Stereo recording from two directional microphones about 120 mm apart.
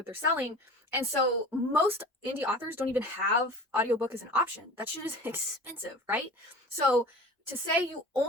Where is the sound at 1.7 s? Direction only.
20° right (ahead or behind).